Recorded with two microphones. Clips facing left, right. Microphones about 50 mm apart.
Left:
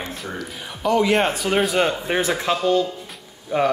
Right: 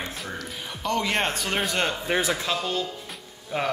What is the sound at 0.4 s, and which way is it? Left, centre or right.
Speech, centre.